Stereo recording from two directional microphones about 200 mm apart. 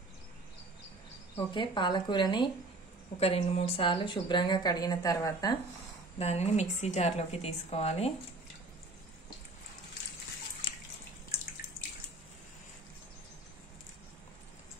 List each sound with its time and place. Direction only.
1.5 s a woman's voice: 25° left (ahead or behind)
6.1 s a woman's voice: 30° left (ahead or behind)